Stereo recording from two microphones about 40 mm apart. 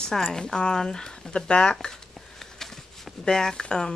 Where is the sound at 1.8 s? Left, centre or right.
Centre.